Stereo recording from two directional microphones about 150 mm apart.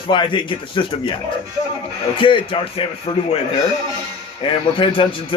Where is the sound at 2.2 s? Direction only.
35° left (ahead or behind).